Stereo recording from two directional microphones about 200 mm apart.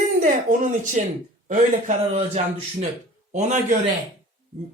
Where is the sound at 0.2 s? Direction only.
40° right (ahead or behind).